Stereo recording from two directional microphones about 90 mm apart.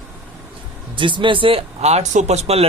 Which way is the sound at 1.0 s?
65° right (ahead or behind).